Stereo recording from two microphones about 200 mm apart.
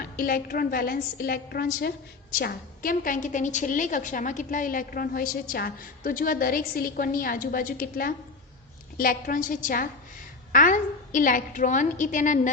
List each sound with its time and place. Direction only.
0.0 s a woman's voice: 45° left (ahead or behind)